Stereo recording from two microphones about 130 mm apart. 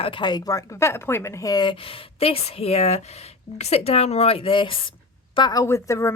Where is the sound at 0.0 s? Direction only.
40° left (ahead or behind).